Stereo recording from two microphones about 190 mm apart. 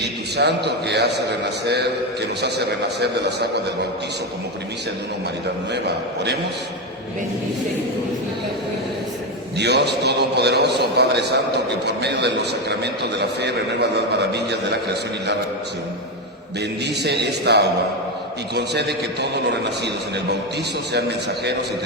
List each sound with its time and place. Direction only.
0.0 s a man's voice: 60° right (ahead or behind)
9.6 s a man's voice: 60° right (ahead or behind)
16.6 s a man's voice: 60° right (ahead or behind)